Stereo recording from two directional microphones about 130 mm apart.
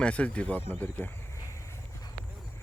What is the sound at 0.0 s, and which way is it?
Speech, 10° left (ahead or behind).